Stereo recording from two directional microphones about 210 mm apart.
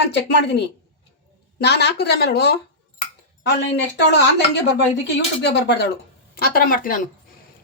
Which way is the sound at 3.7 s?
55° left (ahead or behind).